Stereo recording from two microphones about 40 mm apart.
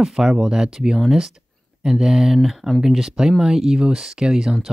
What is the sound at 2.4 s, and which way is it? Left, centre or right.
Speech, centre.